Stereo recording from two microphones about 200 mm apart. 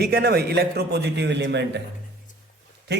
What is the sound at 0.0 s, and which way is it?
A man's voice, 55° right (ahead or behind).